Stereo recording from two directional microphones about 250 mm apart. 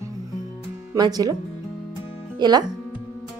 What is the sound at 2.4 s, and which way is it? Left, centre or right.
Speech, centre.